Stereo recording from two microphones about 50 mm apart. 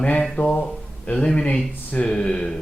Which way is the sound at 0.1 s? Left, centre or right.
Left.